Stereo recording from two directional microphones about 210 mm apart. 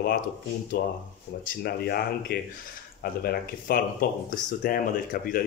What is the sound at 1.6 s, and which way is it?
Speech, 50° left (ahead or behind).